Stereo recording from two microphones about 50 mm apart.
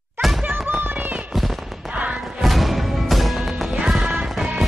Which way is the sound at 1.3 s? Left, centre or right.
Centre.